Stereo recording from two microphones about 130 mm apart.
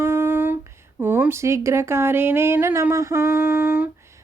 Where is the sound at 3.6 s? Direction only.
10° right (ahead or behind).